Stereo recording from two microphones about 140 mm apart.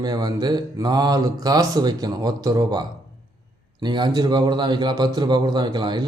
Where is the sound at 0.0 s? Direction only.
30° right (ahead or behind).